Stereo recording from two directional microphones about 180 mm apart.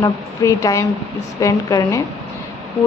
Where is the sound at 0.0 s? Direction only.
15° left (ahead or behind).